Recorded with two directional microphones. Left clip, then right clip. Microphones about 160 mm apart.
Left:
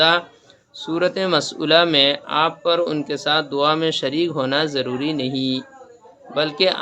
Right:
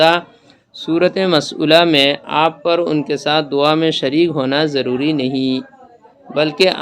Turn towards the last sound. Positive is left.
turn(degrees=-35)  # may be behind; listen again after turning